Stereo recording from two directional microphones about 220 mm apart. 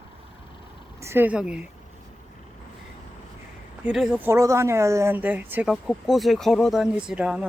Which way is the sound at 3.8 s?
Centre (ahead or behind).